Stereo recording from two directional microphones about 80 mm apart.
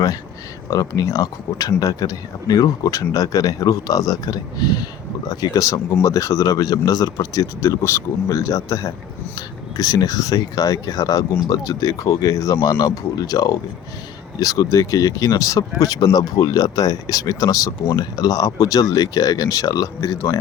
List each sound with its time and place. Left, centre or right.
0.7 s speech: left
15.8 s speech: left